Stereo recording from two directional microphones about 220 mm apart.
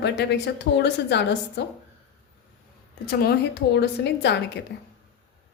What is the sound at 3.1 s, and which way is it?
A woman's voice, 45° left (ahead or behind).